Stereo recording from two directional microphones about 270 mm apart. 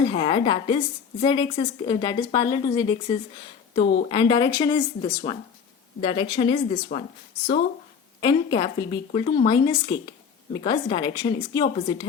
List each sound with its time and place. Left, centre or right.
0.1 s a woman's voice: centre
8.2 s speech: centre